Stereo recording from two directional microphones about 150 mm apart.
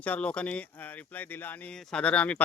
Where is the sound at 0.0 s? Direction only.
10° left (ahead or behind).